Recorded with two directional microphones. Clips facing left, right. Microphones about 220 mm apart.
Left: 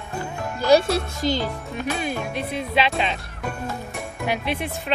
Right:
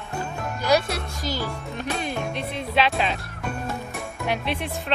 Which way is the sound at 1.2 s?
Centre (ahead or behind).